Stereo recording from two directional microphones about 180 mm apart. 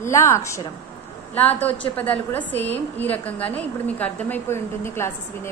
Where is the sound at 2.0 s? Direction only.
10° left (ahead or behind).